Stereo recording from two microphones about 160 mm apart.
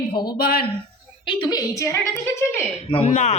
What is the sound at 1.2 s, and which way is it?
A woman's voice, 25° left (ahead or behind).